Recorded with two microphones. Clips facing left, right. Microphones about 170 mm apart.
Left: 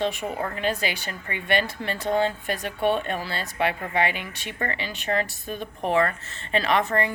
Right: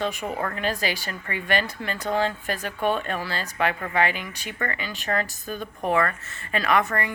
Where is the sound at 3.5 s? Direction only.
20° left (ahead or behind).